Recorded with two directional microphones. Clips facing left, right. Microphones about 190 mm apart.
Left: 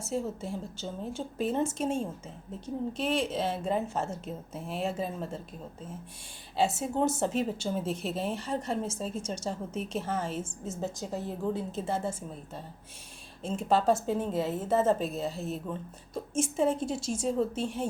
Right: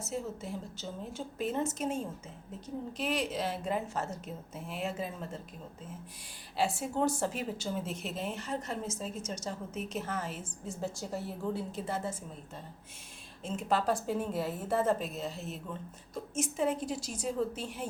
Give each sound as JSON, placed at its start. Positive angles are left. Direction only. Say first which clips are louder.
{"t": 0.0, "sound": "a woman's voice", "louder": "left 4 dB", "side_deg": 30}
{"t": 6.6, "sound": "a woman's voice", "louder": "left 3 dB", "side_deg": 20}
{"t": 13.4, "sound": "a woman's voice", "louder": "left 4 dB", "side_deg": 30}